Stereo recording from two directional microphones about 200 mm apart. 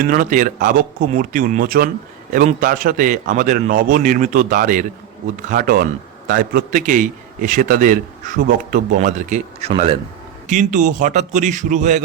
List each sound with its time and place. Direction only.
0.0 s a man's voice: 40° right (ahead or behind)